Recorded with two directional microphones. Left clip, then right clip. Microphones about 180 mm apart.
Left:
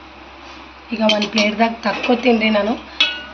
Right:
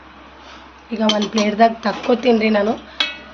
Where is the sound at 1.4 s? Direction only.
65° right (ahead or behind).